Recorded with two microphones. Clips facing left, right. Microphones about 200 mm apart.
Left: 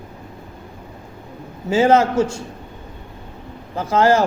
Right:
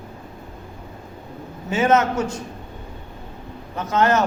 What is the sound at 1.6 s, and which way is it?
Speech, 30° left (ahead or behind).